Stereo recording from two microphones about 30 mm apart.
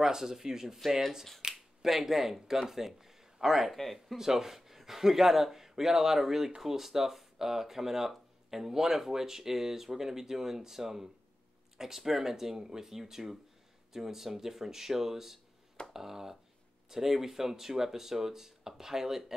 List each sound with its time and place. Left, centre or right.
0.0 s speech: centre
1.4 s finger snapping: centre
1.8 s speech: centre
3.7 s speech: centre
4.2 s speech: centre